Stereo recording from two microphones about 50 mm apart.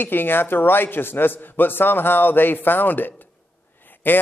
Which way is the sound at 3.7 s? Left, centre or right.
Left.